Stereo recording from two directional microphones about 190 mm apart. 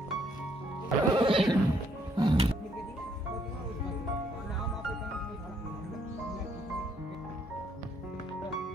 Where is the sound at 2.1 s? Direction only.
25° right (ahead or behind).